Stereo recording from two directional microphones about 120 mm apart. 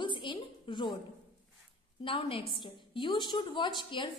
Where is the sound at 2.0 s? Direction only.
50° left (ahead or behind).